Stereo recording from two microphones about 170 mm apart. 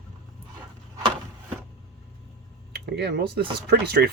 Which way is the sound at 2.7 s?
70° right (ahead or behind).